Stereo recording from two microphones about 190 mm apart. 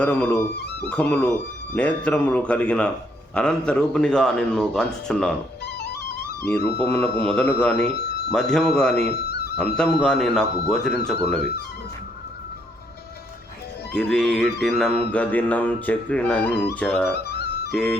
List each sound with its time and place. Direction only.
0.0 s speech: 10° left (ahead or behind)
5.6 s music: 60° left (ahead or behind)
6.8 s speech: 5° left (ahead or behind)
9.3 s music: 55° left (ahead or behind)
9.6 s speech: 5° left (ahead or behind)
13.9 s speech: 5° left (ahead or behind)
17.7 s music: centre (ahead or behind)